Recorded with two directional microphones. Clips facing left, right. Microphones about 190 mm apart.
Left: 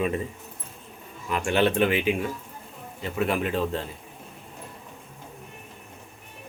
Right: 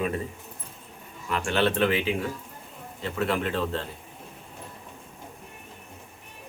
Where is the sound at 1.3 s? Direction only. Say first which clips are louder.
Left 2 dB; 10° left (ahead or behind).